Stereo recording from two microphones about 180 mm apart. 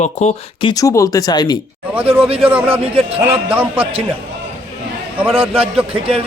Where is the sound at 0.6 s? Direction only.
20° left (ahead or behind).